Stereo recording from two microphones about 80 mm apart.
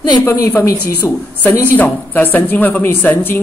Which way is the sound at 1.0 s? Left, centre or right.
Centre.